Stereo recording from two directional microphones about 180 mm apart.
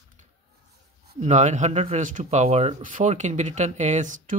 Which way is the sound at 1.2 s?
40° right (ahead or behind).